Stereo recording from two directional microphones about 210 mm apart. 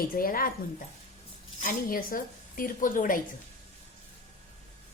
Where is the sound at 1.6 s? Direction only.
40° left (ahead or behind).